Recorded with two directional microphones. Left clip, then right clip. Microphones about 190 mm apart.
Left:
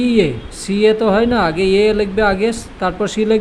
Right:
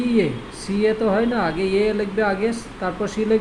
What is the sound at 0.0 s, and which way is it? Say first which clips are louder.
Speech: left 6 dB; 40° left (ahead or behind).